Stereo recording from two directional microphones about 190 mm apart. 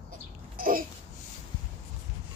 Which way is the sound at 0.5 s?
45° right (ahead or behind).